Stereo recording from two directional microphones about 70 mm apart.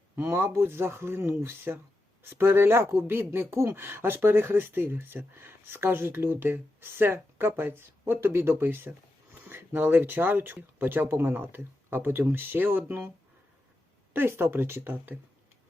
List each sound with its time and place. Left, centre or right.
0.2 s speech: right
14.1 s speech: right